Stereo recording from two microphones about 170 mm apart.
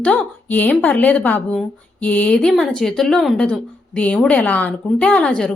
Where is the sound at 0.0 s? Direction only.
10° left (ahead or behind).